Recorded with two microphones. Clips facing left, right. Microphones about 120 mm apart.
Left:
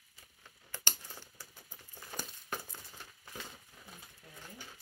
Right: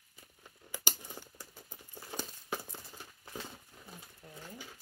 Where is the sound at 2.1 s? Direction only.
25° right (ahead or behind).